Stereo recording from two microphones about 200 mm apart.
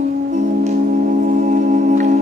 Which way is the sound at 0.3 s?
35° right (ahead or behind).